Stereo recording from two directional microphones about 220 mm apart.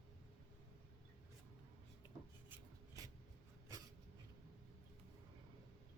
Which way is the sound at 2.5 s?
15° right (ahead or behind).